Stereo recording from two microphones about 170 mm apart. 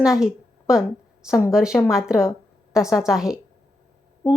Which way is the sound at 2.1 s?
15° left (ahead or behind).